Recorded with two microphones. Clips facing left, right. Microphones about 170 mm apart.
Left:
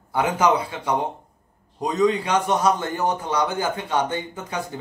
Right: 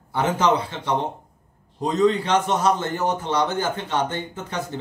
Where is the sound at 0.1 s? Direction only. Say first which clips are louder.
Left 1 dB; 10° left (ahead or behind).